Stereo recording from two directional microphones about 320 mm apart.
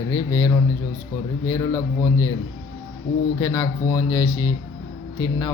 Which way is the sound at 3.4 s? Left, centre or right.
Centre.